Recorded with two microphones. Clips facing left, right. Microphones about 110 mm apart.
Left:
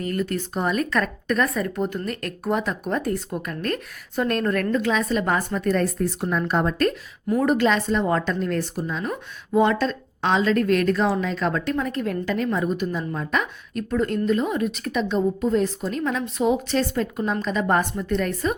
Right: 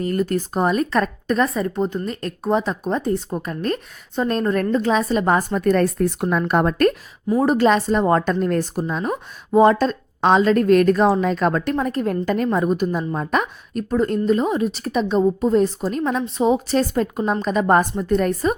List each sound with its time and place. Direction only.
0.0 s a woman's voice: 35° right (ahead or behind); by 6.9 s 55° right (ahead or behind)
7.3 s a woman's voice: 35° right (ahead or behind)